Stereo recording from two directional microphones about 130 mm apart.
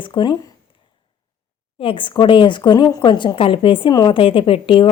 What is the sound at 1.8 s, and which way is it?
A woman's voice, 40° left (ahead or behind).